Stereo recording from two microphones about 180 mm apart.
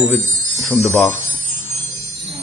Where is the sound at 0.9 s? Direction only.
10° left (ahead or behind).